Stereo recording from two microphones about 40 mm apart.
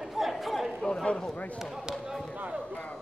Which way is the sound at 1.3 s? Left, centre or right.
Left.